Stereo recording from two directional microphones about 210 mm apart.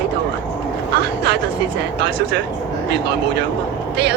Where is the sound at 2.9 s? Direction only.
50° right (ahead or behind).